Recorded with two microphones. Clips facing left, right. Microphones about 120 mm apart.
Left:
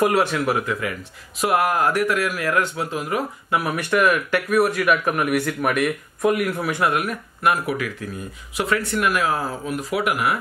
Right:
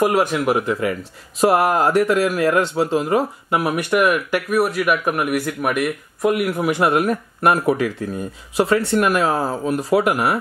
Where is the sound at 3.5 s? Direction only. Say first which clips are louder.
Right 2 dB; 15° right (ahead or behind).